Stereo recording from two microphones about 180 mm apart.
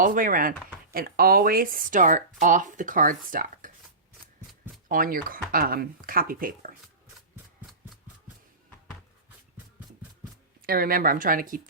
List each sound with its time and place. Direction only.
0.0 s speech: 50° right (ahead or behind)
4.9 s speech: 50° right (ahead or behind)
10.7 s speech: 55° right (ahead or behind)